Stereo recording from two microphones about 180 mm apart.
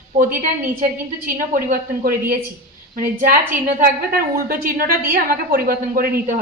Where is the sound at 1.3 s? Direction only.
50° right (ahead or behind).